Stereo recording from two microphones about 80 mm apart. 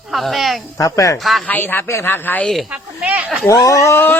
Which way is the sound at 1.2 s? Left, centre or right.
Centre.